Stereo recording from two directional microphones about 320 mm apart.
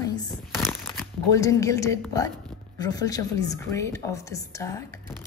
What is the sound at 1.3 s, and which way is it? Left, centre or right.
A woman's voice, centre.